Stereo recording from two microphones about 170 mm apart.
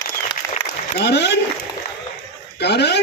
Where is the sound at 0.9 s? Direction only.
85° left.